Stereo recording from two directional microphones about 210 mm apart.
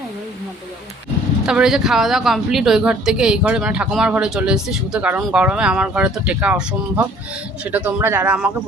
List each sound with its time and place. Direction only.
1.5 s speech: 5° right (ahead or behind)